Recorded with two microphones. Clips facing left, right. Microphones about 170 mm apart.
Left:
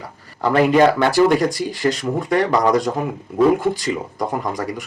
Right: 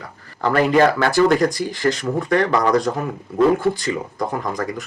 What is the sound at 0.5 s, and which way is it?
Speech, 20° left (ahead or behind).